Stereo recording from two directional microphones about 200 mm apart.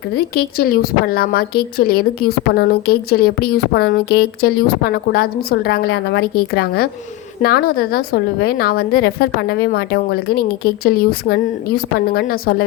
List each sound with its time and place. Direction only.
0.3 s a woman's voice: 50° left (ahead or behind)